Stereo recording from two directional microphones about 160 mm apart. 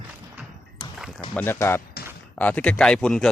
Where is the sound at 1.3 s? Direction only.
10° left (ahead or behind).